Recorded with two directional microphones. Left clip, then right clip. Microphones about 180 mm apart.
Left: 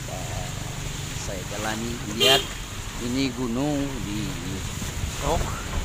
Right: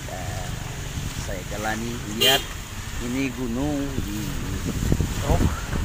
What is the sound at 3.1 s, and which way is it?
Speech, 15° left (ahead or behind).